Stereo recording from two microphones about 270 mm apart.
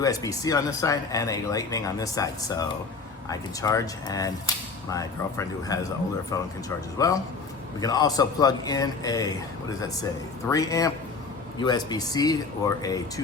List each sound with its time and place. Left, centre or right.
0.0 s speech: centre
10.5 s speech: centre